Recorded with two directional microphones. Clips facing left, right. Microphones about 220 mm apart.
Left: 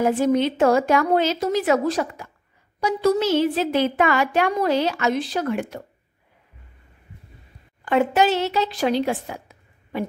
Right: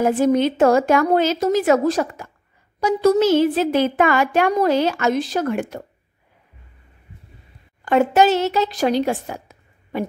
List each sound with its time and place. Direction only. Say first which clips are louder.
0.0 s a woman's voice: right 2 dB; 45° right (ahead or behind)
7.8 s a woman's voice: right 3 dB; 45° right (ahead or behind)